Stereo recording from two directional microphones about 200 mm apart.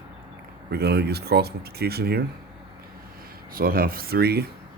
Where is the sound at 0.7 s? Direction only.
55° right (ahead or behind).